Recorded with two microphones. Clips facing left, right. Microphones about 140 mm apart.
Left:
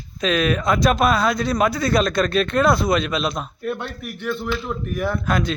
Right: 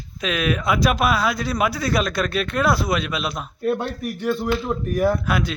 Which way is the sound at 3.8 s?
35° right (ahead or behind).